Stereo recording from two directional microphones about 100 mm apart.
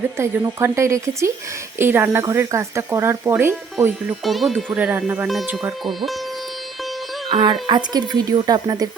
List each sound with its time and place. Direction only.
0.2 s speech: 30° right (ahead or behind)
4.2 s speech: centre (ahead or behind)
4.8 s speech: 15° right (ahead or behind)
5.8 s speech: centre (ahead or behind)
7.3 s speech: 55° right (ahead or behind)
7.7 s speech: 45° right (ahead or behind)